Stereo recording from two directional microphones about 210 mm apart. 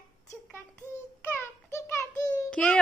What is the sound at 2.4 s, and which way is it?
Speech, 5° left (ahead or behind).